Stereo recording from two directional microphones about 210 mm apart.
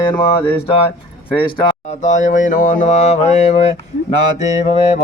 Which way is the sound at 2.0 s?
35° left (ahead or behind).